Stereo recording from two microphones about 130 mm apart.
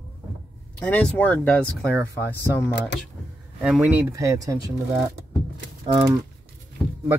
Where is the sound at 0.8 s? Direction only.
10° left (ahead or behind).